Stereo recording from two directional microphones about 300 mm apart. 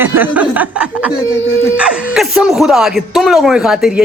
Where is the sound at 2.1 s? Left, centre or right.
Centre.